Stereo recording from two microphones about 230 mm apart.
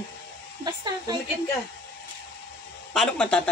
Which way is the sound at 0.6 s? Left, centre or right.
Centre.